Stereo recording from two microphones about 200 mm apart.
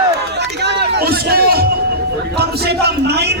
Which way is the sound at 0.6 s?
55° right (ahead or behind).